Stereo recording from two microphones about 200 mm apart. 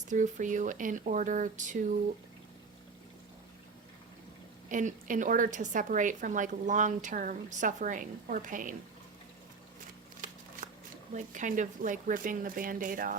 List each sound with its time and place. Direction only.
0.1 s a woman's voice: 40° right (ahead or behind)
4.7 s a woman's voice: 40° right (ahead or behind)
11.1 s a woman's voice: 40° right (ahead or behind)